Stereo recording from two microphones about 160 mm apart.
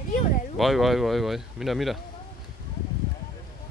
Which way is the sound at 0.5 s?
Centre (ahead or behind).